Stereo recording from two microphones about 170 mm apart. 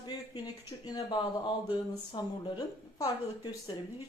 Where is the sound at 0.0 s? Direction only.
25° left (ahead or behind).